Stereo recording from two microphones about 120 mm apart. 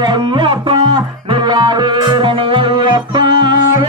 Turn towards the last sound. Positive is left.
turn(degrees=-40)  # may be behind; listen again after turning